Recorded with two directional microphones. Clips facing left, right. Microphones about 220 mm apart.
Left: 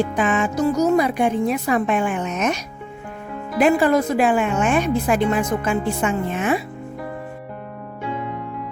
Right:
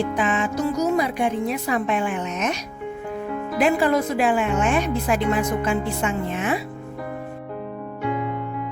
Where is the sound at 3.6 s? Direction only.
50° left (ahead or behind).